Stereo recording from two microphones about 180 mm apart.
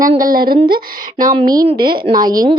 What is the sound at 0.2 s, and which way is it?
Speech, 55° right (ahead or behind).